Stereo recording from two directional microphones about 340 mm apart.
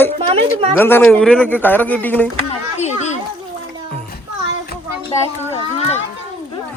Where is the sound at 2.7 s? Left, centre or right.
Centre.